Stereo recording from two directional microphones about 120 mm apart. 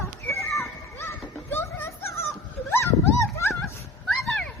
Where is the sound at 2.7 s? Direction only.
20° left (ahead or behind).